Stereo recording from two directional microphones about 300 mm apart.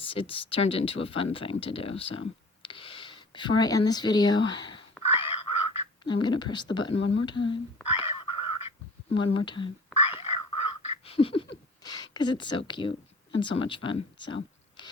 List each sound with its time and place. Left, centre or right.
0.0 s speech: centre
8.0 s a sound: centre
9.1 s whispering: centre
13.4 s speech: centre